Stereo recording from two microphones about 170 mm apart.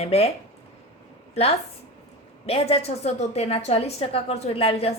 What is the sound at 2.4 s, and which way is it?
A woman's voice, 35° left (ahead or behind).